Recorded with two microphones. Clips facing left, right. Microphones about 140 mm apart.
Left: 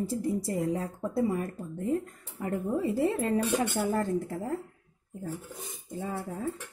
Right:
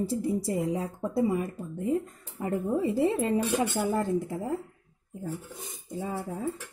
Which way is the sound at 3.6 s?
Centre (ahead or behind).